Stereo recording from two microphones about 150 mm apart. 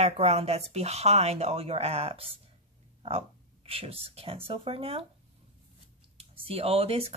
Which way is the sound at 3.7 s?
40° right (ahead or behind).